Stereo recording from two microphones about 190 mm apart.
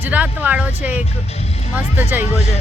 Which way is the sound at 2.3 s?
35° left (ahead or behind).